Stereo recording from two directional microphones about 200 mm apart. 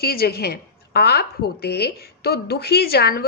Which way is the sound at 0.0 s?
50° left (ahead or behind).